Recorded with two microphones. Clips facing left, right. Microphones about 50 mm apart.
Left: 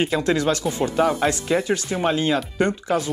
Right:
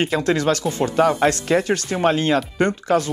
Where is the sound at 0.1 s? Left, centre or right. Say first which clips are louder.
Right 1 dB; right.